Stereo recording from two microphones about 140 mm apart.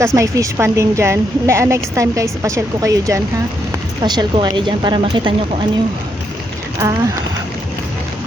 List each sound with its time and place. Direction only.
0.0 s a woman's voice: 20° right (ahead or behind)
6.7 s a woman's voice: 20° right (ahead or behind)